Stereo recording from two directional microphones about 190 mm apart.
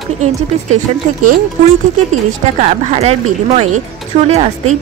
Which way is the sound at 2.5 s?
40° right (ahead or behind).